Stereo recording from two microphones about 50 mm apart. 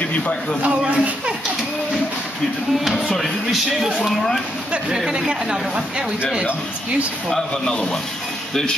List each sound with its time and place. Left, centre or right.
0.6 s a man's voice: right
2.8 s speech: centre
4.8 s speech: centre
7.2 s a man's voice: centre